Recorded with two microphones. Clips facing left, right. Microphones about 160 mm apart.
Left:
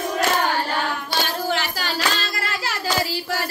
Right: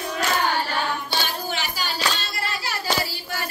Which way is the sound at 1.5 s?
90° left.